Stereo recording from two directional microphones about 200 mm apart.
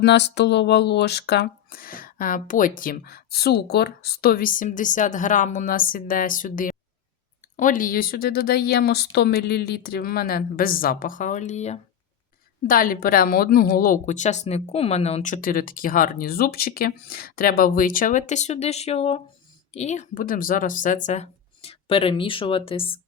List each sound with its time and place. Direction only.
0.0 s speech: 60° left (ahead or behind); by 11.8 s 35° left (ahead or behind)
12.6 s speech: 45° left (ahead or behind); by 23.0 s 30° left (ahead or behind)